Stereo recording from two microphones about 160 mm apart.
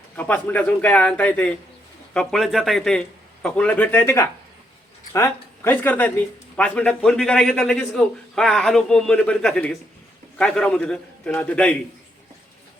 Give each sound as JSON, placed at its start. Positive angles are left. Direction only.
{"t": 0.2, "sound": "a man's voice", "side_deg": 10}